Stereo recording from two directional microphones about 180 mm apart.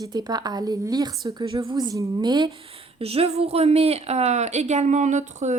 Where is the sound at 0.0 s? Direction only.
25° right (ahead or behind).